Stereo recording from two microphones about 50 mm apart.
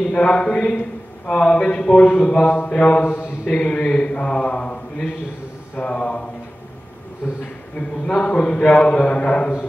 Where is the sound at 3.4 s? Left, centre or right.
Left.